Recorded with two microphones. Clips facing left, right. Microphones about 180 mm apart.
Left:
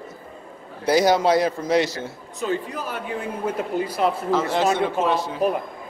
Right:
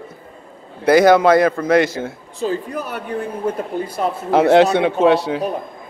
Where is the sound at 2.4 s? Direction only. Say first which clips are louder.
Right 3 dB; 30° right (ahead or behind).